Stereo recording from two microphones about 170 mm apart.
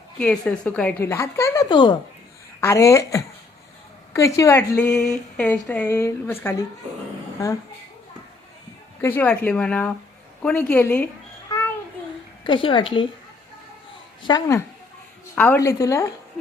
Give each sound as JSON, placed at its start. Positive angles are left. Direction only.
{"t": 0.2, "sound": "a woman's voice", "side_deg": 5}
{"t": 2.6, "sound": "a woman's voice", "side_deg": 15}
{"t": 9.0, "sound": "a woman's voice", "side_deg": 15}
{"t": 12.5, "sound": "a woman's voice", "side_deg": 30}
{"t": 14.2, "sound": "a woman's voice", "side_deg": 25}